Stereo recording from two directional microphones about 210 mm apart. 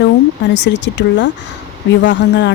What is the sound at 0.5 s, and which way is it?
Speech, 55° left (ahead or behind).